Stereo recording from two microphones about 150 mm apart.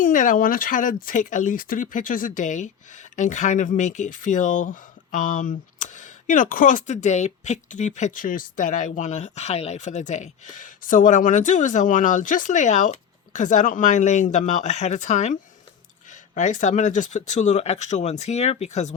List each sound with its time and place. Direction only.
0.0 s speech: 60° left (ahead or behind)